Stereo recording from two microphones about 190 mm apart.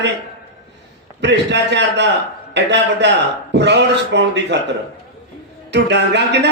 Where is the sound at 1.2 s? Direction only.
65° right (ahead or behind).